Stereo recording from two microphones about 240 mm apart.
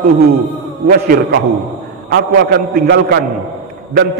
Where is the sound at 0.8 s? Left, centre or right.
Right.